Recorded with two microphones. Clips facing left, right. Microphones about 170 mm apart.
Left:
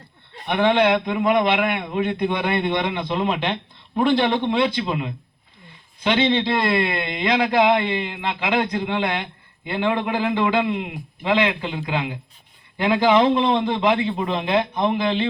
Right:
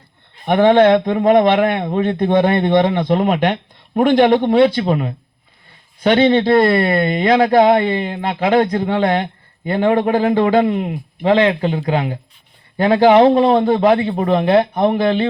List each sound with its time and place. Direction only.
0.4 s speech: 45° right (ahead or behind)